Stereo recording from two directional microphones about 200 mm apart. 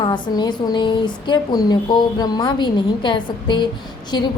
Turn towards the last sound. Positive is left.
turn(degrees=20)  # may be behind; listen again after turning